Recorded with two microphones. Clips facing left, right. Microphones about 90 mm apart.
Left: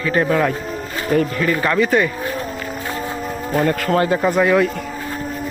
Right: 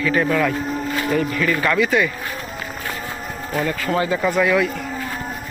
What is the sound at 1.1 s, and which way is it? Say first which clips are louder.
Speech: left 5 dB; 45° left (ahead or behind).